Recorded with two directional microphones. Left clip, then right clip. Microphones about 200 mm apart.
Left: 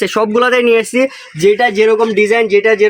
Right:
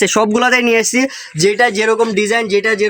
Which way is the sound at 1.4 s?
10° right (ahead or behind).